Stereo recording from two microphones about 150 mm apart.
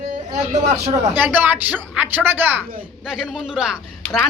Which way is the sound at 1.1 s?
10° right (ahead or behind).